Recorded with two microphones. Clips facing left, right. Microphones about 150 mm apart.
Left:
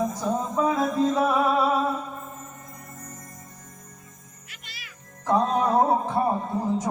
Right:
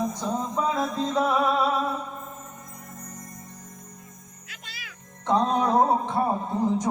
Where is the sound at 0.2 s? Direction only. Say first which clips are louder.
Left 3 dB; 5° left (ahead or behind).